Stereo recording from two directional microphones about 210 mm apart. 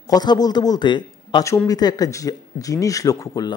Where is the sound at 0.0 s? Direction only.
20° left (ahead or behind).